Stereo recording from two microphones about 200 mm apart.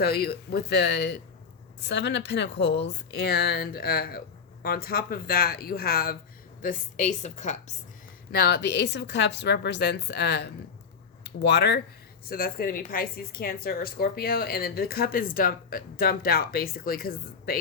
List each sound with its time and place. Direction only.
0.0 s a woman's voice: 50° left (ahead or behind); by 7.5 s 35° left (ahead or behind)
8.3 s a woman's voice: 55° left (ahead or behind)